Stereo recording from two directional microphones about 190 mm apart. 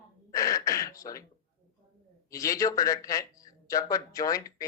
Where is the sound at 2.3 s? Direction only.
20° left (ahead or behind).